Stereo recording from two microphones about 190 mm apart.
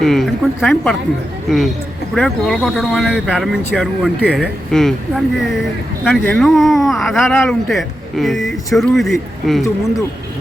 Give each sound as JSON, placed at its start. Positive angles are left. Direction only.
{"t": 0.0, "sound": "speech", "side_deg": 0}